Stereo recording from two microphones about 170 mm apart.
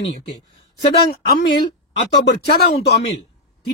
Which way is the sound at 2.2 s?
70° left (ahead or behind).